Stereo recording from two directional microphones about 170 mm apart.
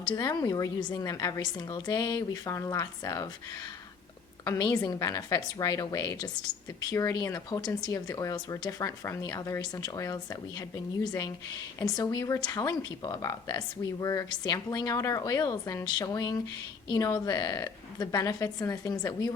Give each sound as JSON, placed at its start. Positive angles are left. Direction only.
{"t": 0.1, "sound": "speech", "side_deg": 25}
{"t": 4.4, "sound": "speech", "side_deg": 25}
{"t": 11.8, "sound": "speech", "side_deg": 25}